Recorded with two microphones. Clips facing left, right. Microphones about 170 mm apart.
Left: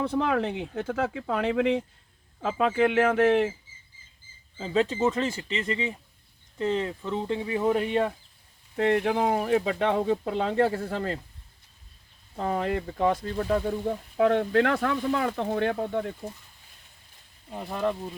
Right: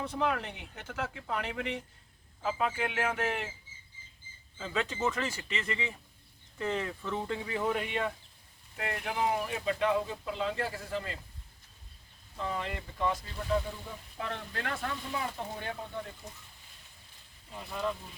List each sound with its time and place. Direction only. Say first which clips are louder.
0.0 s speech: left 7 dB; 65° left (ahead or behind)
0.9 s speech: left 6 dB; 60° left (ahead or behind)
4.5 s speech: left 9 dB; 30° left (ahead or behind)
7.8 s speech: left 8 dB; 45° left (ahead or behind)
8.7 s speech: left 12 dB; 60° left (ahead or behind)
12.4 s speech: left 9 dB; 45° left (ahead or behind)
17.5 s speech: left 7 dB; 50° left (ahead or behind)